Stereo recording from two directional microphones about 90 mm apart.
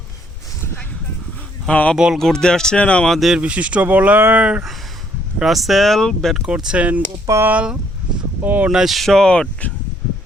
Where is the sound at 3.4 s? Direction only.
15° right (ahead or behind).